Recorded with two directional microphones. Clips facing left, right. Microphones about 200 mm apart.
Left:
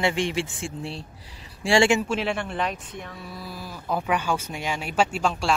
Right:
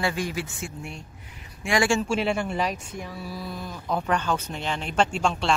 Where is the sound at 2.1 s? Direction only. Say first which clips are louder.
Right 2 dB; centre (ahead or behind).